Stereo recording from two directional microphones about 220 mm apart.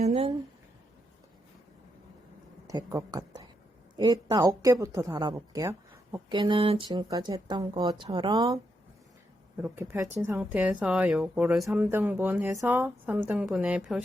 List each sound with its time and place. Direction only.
0.0 s speech: 30° right (ahead or behind)
2.6 s a woman's voice: 15° right (ahead or behind)
9.6 s speech: 5° right (ahead or behind)